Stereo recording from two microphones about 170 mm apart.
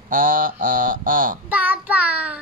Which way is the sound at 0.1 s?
55° right (ahead or behind).